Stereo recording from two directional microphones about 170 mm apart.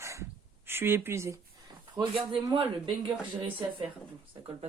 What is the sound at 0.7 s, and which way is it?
Speech, 15° right (ahead or behind).